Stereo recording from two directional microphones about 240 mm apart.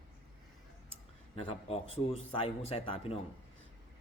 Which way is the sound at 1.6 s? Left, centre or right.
Left.